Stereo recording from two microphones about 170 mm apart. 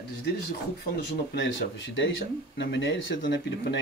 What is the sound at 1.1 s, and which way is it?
Speech, 90° left.